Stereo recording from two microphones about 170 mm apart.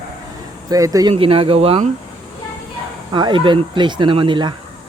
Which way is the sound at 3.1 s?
25° right (ahead or behind).